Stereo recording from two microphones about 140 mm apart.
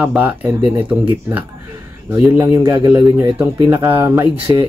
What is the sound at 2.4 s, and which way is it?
Speech, 15° right (ahead or behind).